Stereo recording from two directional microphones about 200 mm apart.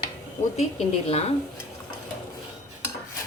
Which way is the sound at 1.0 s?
30° left (ahead or behind).